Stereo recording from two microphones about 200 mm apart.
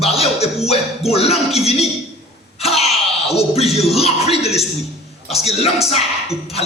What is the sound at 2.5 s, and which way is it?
Throat clearing, 30° left (ahead or behind).